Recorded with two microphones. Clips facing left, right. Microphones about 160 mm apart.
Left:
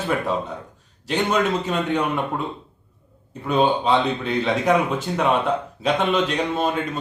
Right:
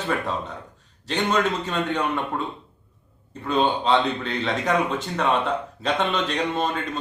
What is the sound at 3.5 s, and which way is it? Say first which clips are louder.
Speech: left 2 dB; 10° left (ahead or behind).